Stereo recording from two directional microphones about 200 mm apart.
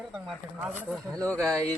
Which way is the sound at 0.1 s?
5° right (ahead or behind).